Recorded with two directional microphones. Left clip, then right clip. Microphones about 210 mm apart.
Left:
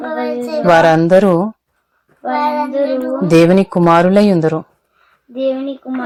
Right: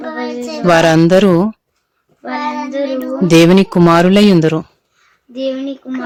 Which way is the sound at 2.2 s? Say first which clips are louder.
Left 4 dB; 30° right (ahead or behind).